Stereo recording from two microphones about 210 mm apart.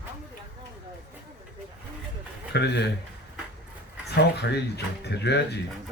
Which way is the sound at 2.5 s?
55° left (ahead or behind).